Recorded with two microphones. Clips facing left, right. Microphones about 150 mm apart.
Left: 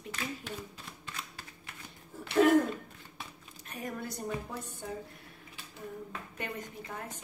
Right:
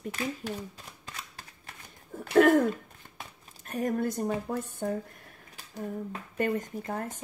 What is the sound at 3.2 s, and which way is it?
A woman's voice, 45° right (ahead or behind).